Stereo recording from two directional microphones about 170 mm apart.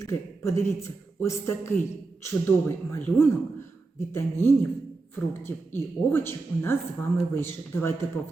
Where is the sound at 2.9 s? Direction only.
15° left (ahead or behind).